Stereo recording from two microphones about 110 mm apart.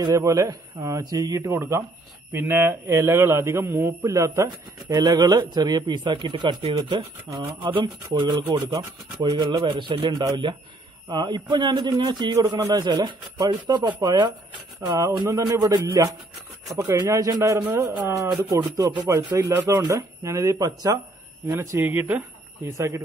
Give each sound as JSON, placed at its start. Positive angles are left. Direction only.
{"t": 0.0, "sound": "a man's voice", "side_deg": -30}
{"t": 4.7, "sound": "a man's voice", "side_deg": -40}
{"t": 18.8, "sound": "a man's voice", "side_deg": -40}
{"t": 19.0, "sound": "a man's voice", "side_deg": -30}
{"t": 21.5, "sound": "a man's voice", "side_deg": -20}